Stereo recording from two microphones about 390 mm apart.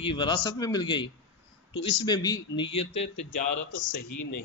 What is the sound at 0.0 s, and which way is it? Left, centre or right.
A man's voice, centre.